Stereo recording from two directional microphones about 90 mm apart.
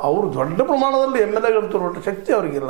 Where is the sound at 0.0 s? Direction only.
25° right (ahead or behind).